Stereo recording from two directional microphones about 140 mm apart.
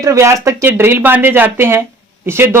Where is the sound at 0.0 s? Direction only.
20° right (ahead or behind).